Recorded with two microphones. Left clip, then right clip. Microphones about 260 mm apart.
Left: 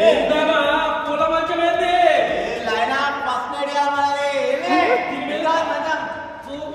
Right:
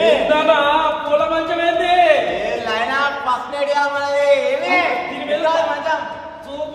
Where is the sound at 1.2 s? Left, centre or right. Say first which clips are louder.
Even; centre.